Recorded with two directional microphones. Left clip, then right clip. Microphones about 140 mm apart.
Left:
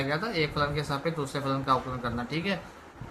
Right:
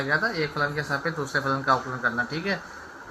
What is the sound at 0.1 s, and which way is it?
Speech, 15° right (ahead or behind).